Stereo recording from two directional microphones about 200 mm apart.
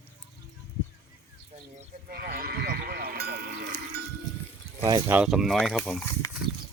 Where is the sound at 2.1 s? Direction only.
50° right (ahead or behind).